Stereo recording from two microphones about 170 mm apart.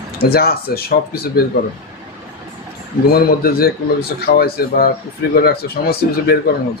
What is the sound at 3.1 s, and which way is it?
Speech, 65° left (ahead or behind).